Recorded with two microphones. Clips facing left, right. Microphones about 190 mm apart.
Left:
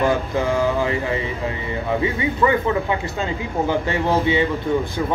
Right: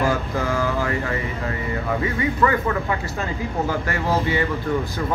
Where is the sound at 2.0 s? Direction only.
20° left (ahead or behind).